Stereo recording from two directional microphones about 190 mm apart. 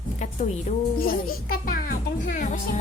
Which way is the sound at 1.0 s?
50° left (ahead or behind).